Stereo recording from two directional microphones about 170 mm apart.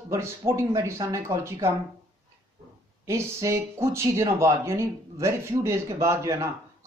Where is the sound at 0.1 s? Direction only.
15° right (ahead or behind).